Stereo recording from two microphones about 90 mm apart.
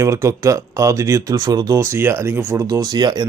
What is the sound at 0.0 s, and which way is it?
A man's voice, 35° right (ahead or behind).